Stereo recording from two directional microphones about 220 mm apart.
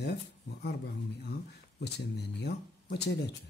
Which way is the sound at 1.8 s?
50° left (ahead or behind).